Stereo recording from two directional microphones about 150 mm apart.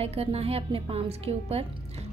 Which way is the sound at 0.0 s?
40° right (ahead or behind).